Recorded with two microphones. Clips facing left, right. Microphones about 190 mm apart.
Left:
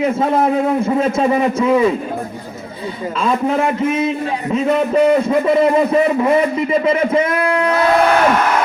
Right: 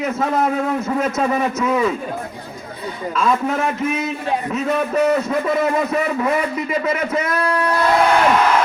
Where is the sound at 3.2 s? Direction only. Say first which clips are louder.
Left 3 dB; 30° left (ahead or behind).